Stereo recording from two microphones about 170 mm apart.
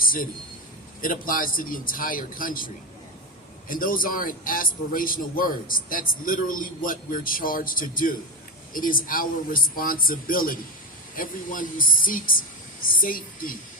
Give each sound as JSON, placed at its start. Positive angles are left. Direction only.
{"t": 0.0, "sound": "a sound", "side_deg": 55}
{"t": 1.0, "sound": "a man's voice", "side_deg": 55}
{"t": 3.7, "sound": "a man's voice", "side_deg": 55}